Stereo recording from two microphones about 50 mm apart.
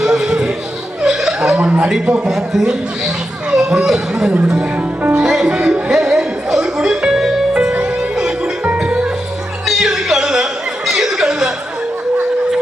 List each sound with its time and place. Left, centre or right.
0.0 s music: centre
1.0 s chuckle: centre
1.5 s a man's voice: right
2.2 s a man's voice: centre
5.1 s music: centre
8.8 s music: right
9.6 s music: centre
10.8 s a sound: centre